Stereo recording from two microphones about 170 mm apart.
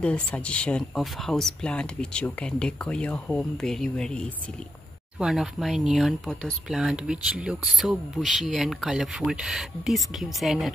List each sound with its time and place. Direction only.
0.0 s speech: 5° left (ahead or behind)